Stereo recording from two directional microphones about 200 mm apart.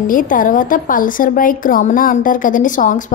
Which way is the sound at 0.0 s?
45° left (ahead or behind).